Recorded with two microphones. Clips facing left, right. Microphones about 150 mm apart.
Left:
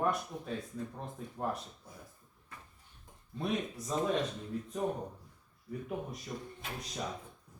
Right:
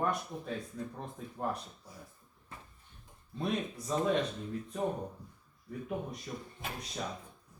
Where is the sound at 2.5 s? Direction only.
30° right (ahead or behind).